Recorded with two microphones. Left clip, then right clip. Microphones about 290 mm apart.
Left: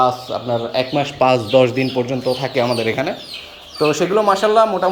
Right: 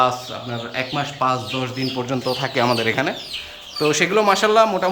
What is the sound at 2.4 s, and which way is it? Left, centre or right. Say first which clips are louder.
Speech: even; right.